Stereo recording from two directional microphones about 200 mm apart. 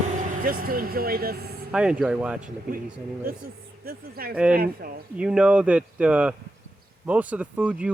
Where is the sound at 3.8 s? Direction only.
45° right (ahead or behind).